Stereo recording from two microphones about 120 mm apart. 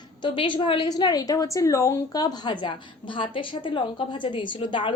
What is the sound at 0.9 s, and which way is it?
A woman's voice, 35° left (ahead or behind).